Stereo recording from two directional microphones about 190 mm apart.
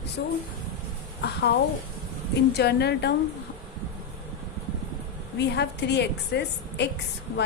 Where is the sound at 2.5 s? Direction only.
60° left (ahead or behind).